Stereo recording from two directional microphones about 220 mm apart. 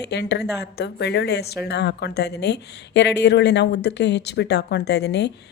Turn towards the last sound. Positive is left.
turn(degrees=50)  # may be behind; listen again after turning